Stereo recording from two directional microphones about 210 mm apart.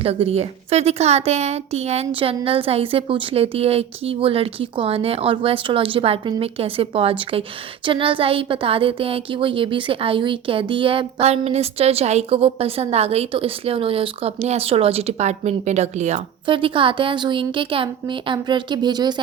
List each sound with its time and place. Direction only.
0.0 s speech: 30° right (ahead or behind)